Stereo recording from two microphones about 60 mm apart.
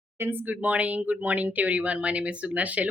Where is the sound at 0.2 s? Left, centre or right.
Right.